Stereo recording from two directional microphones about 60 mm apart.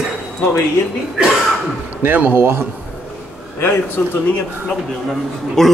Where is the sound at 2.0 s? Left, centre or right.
Right.